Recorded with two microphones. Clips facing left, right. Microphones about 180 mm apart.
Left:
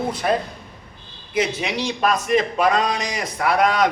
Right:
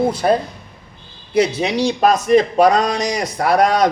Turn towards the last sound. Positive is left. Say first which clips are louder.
# right 4 dB
turn(degrees=-40)  # may be behind; listen again after turning